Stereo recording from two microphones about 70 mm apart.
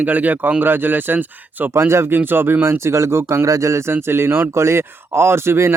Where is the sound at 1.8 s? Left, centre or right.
Right.